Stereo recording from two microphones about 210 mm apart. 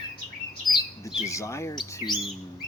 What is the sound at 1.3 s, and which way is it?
Speech, 15° left (ahead or behind).